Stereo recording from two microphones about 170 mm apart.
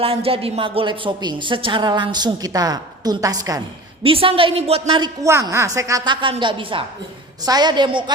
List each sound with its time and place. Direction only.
0.0 s a woman's voice: 35° right (ahead or behind)
4.0 s a woman's voice: 35° right (ahead or behind)